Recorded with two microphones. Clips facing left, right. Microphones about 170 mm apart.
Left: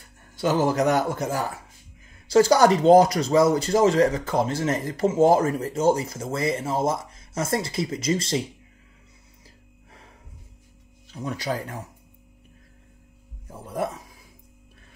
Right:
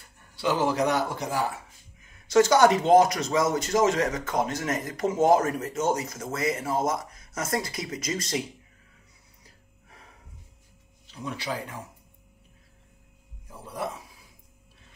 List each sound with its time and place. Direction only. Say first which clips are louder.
0.4 s speech: left 3 dB; 45° left (ahead or behind)
2.2 s speech: left 2 dB; 30° left (ahead or behind)
11.2 s speech: left 5 dB; 45° left (ahead or behind)